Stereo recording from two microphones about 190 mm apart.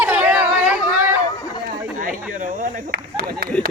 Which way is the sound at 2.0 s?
45° right (ahead or behind).